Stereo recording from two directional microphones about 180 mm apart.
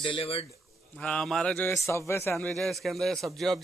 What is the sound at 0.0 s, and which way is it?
Speech, 30° left (ahead or behind).